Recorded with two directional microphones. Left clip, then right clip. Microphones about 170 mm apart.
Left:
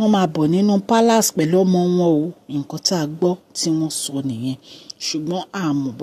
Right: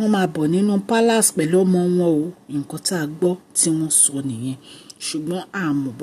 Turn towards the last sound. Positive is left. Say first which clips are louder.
# left 1 dB
turn(degrees=20)  # may be behind; listen again after turning